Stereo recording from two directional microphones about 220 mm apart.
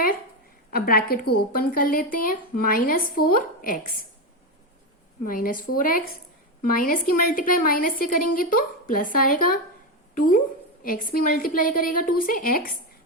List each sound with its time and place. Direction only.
0.7 s a woman's voice: 45° left (ahead or behind)
5.2 s a woman's voice: 40° left (ahead or behind)